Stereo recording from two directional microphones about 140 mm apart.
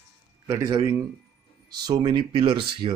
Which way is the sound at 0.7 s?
25° right (ahead or behind).